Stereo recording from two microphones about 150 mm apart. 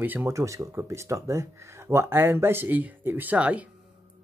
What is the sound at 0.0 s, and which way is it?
Speech, 15° right (ahead or behind).